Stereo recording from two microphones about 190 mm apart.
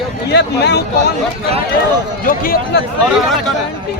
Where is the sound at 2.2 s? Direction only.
50° left (ahead or behind).